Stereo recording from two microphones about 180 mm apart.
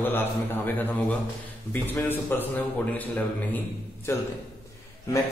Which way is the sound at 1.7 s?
10° left (ahead or behind).